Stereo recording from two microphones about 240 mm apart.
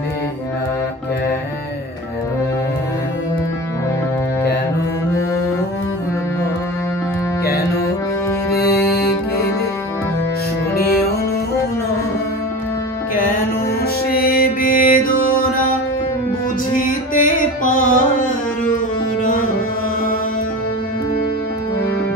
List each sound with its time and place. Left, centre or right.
14.1 s music: left
16.7 s music: left